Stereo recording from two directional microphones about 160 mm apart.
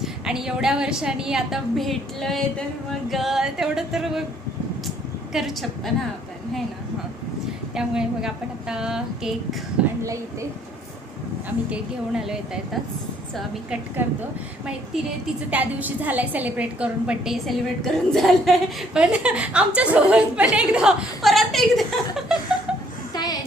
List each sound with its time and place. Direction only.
0.0 s a woman's voice: 5° right (ahead or behind)
5.3 s a woman's voice: centre (ahead or behind)
7.8 s a woman's voice: 5° right (ahead or behind)
11.4 s a woman's voice: 5° right (ahead or behind)
15.4 s a woman's voice: 10° right (ahead or behind)
23.1 s a sound: 25° left (ahead or behind)